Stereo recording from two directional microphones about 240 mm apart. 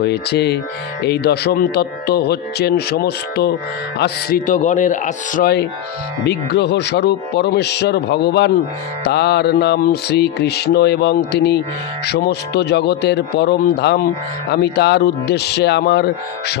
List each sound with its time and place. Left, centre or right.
0.0 s mantra: left
2.9 s speech: left
6.2 s mantra: left